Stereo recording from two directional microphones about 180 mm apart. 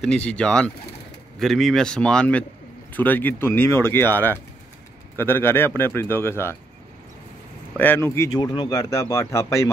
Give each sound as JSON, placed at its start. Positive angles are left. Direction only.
{"t": 0.0, "sound": "a man's voice", "side_deg": 5}
{"t": 7.7, "sound": "speech", "side_deg": 10}